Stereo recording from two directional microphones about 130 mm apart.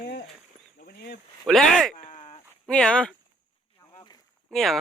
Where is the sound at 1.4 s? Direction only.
Centre (ahead or behind).